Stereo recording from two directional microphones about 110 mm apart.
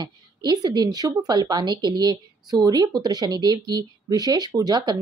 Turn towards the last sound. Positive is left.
turn(degrees=-35)  # may be behind; listen again after turning